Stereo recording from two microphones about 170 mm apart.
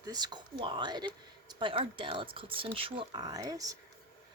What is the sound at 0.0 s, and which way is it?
Speech, 25° right (ahead or behind).